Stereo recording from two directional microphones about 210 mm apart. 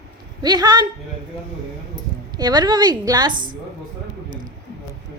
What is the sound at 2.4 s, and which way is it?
Speech, 20° right (ahead or behind).